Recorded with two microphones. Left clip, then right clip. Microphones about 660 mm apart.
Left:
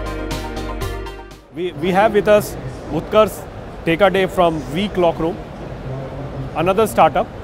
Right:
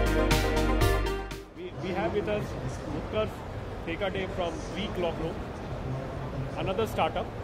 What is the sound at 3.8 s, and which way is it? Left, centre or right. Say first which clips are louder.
Speech: left 18 dB; left.